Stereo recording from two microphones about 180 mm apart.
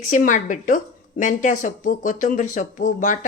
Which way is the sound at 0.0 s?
45° left (ahead or behind).